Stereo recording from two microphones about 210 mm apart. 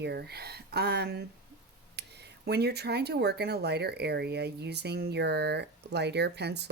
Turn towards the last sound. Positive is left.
turn(degrees=-50)  # may be behind; listen again after turning